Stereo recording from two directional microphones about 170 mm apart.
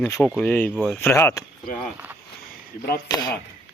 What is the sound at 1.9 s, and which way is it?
Speech, 10° right (ahead or behind).